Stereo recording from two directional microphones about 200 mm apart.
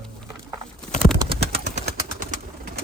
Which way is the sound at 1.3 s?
55° right (ahead or behind).